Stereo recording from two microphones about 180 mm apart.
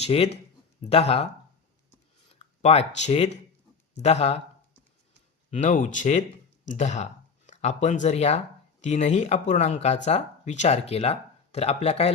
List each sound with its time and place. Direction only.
0.0 s speech: 35° left (ahead or behind)
2.3 s speech: 35° left (ahead or behind)
5.5 s speech: 40° left (ahead or behind)